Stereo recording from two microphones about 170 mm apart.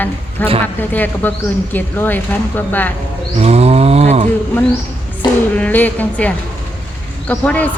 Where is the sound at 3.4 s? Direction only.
40° right (ahead or behind).